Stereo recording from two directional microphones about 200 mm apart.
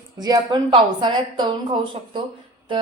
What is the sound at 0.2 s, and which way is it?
Speech, 20° right (ahead or behind).